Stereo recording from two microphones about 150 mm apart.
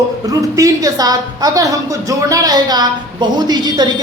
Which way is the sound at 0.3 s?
25° right (ahead or behind).